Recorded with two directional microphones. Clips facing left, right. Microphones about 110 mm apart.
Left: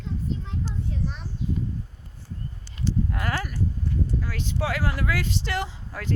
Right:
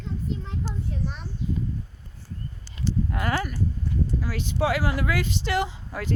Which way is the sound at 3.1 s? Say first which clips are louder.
Right 3 dB; 5° right (ahead or behind).